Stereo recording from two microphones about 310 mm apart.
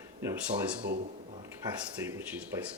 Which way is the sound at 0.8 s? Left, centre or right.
Right.